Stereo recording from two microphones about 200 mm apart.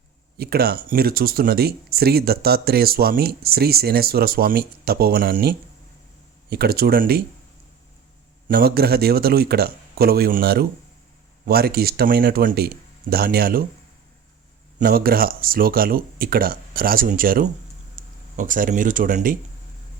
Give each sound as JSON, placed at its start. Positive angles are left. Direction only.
{"t": 0.3, "sound": "speech", "side_deg": -50}
{"t": 8.4, "sound": "speech", "side_deg": -50}
{"t": 14.8, "sound": "speech", "side_deg": -45}